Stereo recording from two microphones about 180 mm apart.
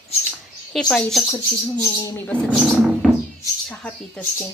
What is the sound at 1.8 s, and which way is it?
Speech, 15° left (ahead or behind).